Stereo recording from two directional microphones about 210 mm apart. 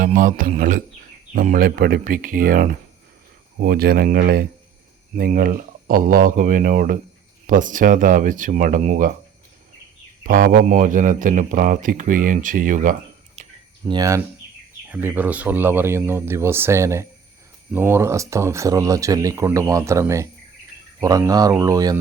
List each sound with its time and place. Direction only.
0.0 s speech: 40° right (ahead or behind)
10.2 s speech: 40° right (ahead or behind)
13.8 s speech: 20° right (ahead or behind)